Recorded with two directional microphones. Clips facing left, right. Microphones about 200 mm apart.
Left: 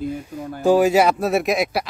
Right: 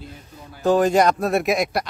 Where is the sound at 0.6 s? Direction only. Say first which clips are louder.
Left 2 dB; 10° left (ahead or behind).